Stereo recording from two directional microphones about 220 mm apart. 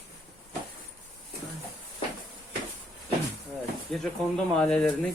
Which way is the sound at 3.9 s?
Centre (ahead or behind).